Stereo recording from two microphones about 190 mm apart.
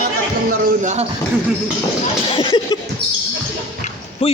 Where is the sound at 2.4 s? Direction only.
25° left (ahead or behind).